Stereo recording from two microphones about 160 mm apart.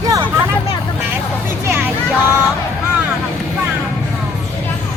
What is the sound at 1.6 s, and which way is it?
Hubbub, 15° right (ahead or behind).